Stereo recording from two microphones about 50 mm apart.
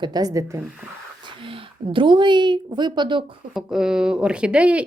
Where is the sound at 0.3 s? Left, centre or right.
Right.